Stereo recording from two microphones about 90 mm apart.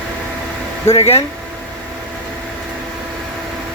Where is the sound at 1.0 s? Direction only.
90° left.